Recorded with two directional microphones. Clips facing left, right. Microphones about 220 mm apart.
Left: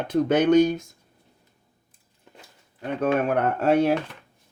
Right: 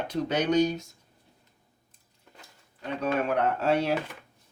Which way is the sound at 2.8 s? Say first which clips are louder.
Left 5 dB; 50° left (ahead or behind).